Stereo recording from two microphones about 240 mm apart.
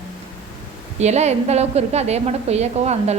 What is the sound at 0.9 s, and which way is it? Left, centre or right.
A woman's voice, right.